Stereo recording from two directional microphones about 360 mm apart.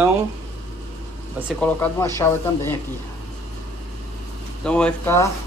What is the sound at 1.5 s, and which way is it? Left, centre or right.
A man's voice, centre.